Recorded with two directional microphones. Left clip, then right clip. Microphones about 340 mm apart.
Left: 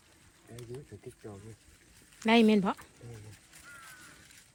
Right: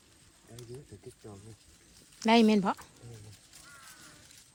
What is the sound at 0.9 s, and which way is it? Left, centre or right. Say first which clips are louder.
Speech: left 2 dB; centre.